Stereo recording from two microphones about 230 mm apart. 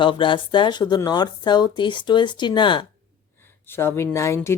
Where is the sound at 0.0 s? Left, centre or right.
Left.